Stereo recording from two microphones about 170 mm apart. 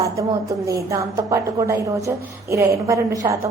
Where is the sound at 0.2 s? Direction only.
20° right (ahead or behind).